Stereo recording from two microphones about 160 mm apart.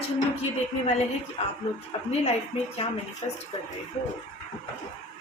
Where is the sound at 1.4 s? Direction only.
40° left (ahead or behind).